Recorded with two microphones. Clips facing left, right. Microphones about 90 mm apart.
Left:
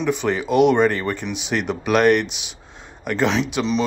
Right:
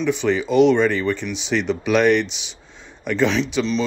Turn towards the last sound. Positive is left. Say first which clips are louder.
# even
turn(degrees=10)  # may be behind; listen again after turning